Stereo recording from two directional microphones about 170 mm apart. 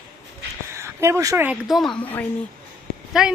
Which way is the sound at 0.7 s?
15° right (ahead or behind).